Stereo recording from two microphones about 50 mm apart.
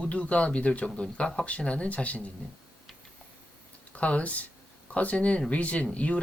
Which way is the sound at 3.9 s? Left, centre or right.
Left.